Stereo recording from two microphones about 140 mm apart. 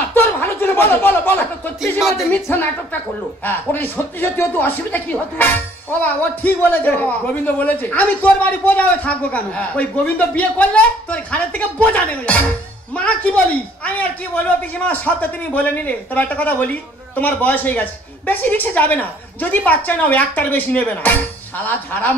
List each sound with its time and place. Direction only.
0.1 s chuckle: 15° left (ahead or behind)
2.1 s speech: 20° left (ahead or behind)